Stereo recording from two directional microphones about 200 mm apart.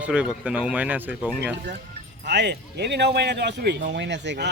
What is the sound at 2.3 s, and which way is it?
A man's voice, 60° right (ahead or behind).